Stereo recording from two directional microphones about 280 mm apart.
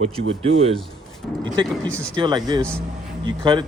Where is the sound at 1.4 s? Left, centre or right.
Centre.